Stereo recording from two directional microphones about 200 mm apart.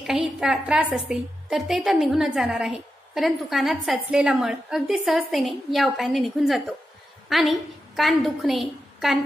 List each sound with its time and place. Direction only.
0.0 s a woman's voice: 5° right (ahead or behind)